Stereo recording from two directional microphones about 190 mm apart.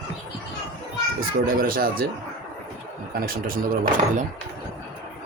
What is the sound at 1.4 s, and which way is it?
Speech, 50° right (ahead or behind).